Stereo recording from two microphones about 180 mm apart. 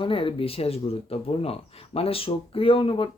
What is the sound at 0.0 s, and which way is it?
Speech, 30° left (ahead or behind).